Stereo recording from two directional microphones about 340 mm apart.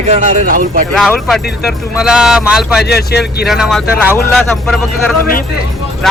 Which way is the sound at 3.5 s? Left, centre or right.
Centre.